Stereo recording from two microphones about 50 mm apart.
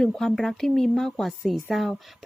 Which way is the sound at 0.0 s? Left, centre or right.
Centre.